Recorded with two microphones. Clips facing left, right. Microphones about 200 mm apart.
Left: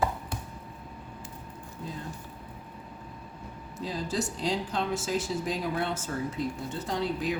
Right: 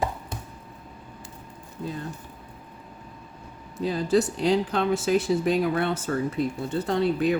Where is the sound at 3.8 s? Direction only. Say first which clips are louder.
Right 9 dB; 65° right (ahead or behind).